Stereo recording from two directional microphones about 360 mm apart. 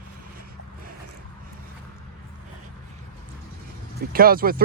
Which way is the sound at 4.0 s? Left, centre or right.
Right.